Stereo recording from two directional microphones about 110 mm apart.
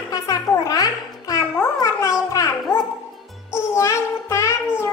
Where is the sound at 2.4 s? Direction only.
30° left (ahead or behind).